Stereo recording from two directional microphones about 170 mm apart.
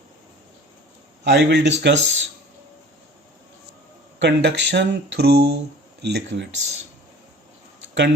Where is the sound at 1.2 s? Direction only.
80° right.